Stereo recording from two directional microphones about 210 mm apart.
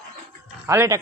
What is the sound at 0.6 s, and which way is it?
Speech, 15° right (ahead or behind).